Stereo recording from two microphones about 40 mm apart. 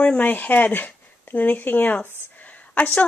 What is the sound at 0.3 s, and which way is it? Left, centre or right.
Speech, left.